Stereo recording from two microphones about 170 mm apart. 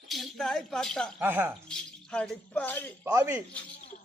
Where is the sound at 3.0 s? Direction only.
15° right (ahead or behind).